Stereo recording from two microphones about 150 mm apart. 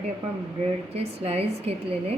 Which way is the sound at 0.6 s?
40° right (ahead or behind).